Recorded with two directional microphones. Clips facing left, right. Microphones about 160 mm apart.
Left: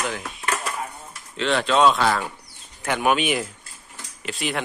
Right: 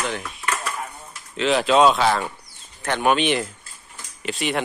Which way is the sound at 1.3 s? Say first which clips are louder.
Right 3 dB; 5° right (ahead or behind).